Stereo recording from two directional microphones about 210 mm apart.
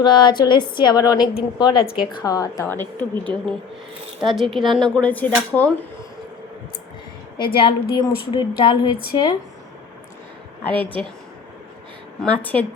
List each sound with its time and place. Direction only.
0.0 s a woman's voice: 20° left (ahead or behind)
7.3 s a woman's voice: 25° left (ahead or behind)
10.8 s a woman's voice: 5° left (ahead or behind)
12.2 s a woman's voice: 5° left (ahead or behind)